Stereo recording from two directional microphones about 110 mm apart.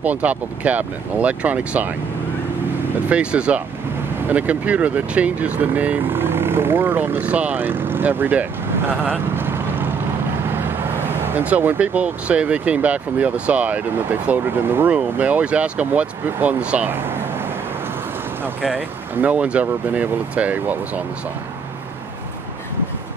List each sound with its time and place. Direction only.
0.0 s speech: 15° right (ahead or behind)
3.1 s speech: 10° right (ahead or behind)
9.3 s vehicle: 20° right (ahead or behind)
10.6 s speech: 20° right (ahead or behind)
18.8 s speech: 15° right (ahead or behind)